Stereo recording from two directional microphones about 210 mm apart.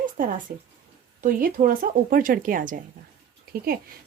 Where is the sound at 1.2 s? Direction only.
40° right (ahead or behind).